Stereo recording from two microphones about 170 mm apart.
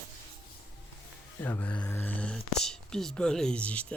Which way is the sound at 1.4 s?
10° left (ahead or behind).